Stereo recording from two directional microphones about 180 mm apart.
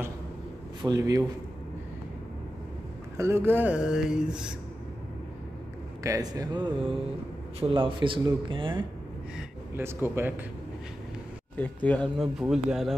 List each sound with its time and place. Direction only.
0.8 s speech: 20° right (ahead or behind)
3.2 s speech: 15° right (ahead or behind)
6.0 s speech: 20° right (ahead or behind)
9.8 s speech: 10° right (ahead or behind)
11.5 s speech: 10° left (ahead or behind)